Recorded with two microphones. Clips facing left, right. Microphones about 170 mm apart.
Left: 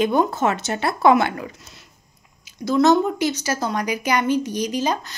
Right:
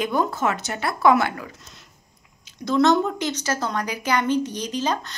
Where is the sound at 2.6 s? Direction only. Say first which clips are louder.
Left 2 dB; 5° left (ahead or behind).